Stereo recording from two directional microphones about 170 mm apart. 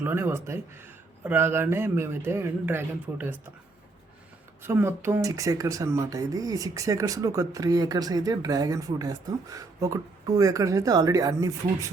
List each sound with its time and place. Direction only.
0.0 s a man's voice: 15° right (ahead or behind)
4.6 s speech: 15° right (ahead or behind)